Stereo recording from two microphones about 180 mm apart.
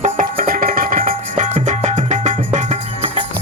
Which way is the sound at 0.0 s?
50° right (ahead or behind).